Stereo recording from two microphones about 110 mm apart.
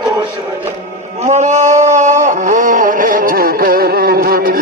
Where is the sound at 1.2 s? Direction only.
90° right.